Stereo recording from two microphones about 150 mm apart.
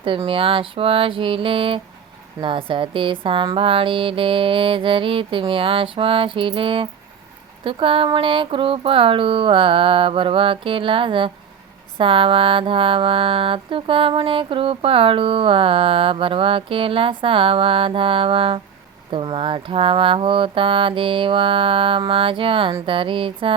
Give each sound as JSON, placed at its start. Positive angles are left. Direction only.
{"t": 0.3, "sound": "mantra", "side_deg": -35}